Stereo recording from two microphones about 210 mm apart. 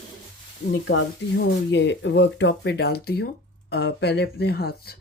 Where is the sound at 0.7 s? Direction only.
55° left (ahead or behind).